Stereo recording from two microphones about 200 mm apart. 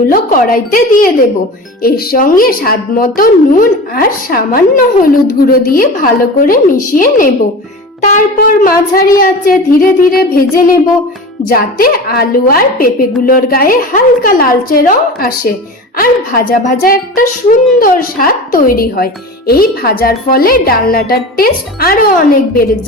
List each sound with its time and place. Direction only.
0.0 s a woman's voice: 45° left (ahead or behind)
8.4 s a woman's voice: 45° left (ahead or behind)